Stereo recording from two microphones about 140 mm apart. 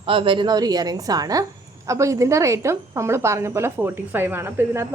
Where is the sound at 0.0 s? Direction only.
40° right (ahead or behind).